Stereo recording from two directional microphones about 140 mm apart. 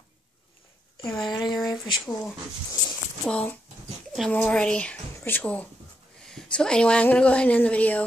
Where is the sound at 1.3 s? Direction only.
30° left (ahead or behind).